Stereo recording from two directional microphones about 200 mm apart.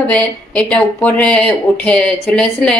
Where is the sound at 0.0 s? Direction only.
5° left (ahead or behind).